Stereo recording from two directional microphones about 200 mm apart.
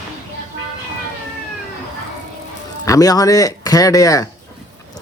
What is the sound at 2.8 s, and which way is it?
A man's voice, 15° left (ahead or behind).